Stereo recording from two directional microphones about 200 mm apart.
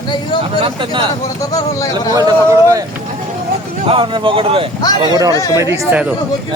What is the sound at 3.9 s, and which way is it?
A man's voice, 25° right (ahead or behind).